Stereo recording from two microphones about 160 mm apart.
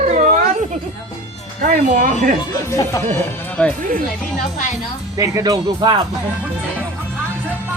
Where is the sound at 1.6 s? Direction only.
60° right (ahead or behind).